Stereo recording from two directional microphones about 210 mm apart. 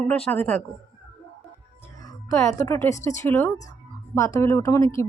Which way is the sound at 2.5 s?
15° left (ahead or behind).